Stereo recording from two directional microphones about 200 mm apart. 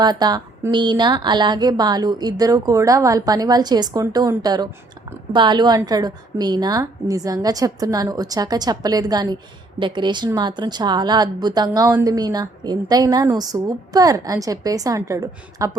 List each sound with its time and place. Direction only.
0.0 s a woman's voice: 20° right (ahead or behind)